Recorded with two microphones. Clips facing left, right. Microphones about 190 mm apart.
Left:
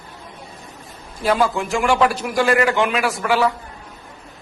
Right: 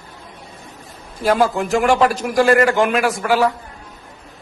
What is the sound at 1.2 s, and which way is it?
Speech, 45° right (ahead or behind).